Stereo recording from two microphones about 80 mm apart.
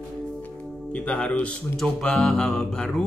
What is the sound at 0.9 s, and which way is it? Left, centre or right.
Speech, centre.